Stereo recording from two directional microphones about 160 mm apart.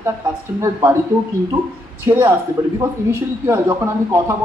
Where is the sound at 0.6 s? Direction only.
20° right (ahead or behind).